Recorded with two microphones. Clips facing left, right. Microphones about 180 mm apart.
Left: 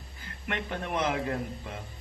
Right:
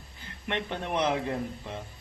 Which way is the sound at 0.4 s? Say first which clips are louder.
Right 2 dB; 25° right (ahead or behind).